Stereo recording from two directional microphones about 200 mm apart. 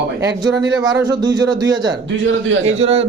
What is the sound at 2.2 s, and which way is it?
Speech, 70° right (ahead or behind).